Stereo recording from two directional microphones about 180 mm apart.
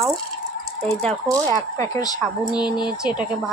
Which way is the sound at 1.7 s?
20° left (ahead or behind).